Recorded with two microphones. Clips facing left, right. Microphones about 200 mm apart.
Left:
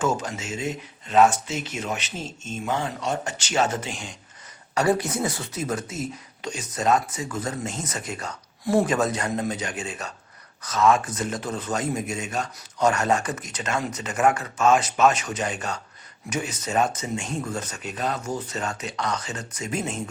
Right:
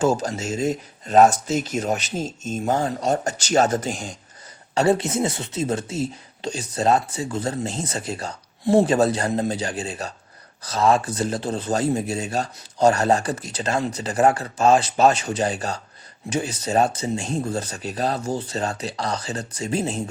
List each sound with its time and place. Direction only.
0.0 s speech: 35° right (ahead or behind)
4.7 s speech: 25° right (ahead or behind)